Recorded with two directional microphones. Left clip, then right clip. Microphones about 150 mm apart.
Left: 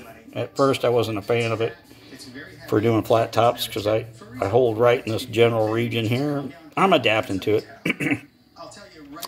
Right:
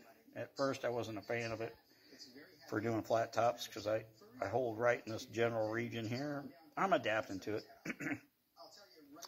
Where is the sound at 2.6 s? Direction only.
5° left (ahead or behind).